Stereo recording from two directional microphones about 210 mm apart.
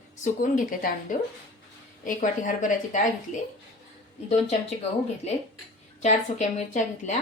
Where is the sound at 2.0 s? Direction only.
40° left (ahead or behind).